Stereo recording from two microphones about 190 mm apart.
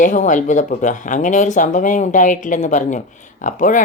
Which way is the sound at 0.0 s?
40° left (ahead or behind).